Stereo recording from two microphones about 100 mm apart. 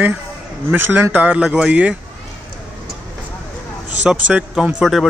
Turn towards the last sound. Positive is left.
turn(degrees=0)  # may be behind; listen again after turning